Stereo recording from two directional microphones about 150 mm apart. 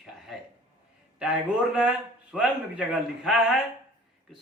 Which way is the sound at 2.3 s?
10° right (ahead or behind).